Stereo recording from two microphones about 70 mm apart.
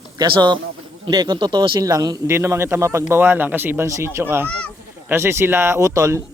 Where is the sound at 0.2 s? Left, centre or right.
Right.